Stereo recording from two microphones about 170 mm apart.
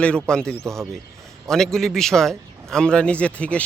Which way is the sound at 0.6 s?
15° right (ahead or behind).